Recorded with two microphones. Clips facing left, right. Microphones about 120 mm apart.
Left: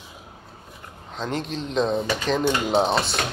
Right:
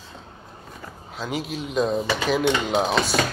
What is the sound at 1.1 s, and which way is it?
Speech, 5° right (ahead or behind).